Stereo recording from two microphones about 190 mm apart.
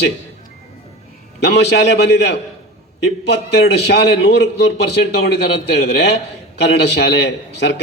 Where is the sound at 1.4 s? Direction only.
65° left (ahead or behind).